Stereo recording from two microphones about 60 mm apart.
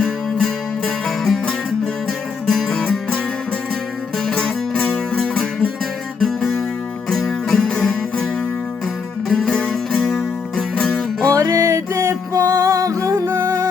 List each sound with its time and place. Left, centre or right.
0.0 s music: centre
4.2 s music: centre
6.1 s guitar: centre
7.1 s music: centre
9.3 s music: centre
11.4 s music: right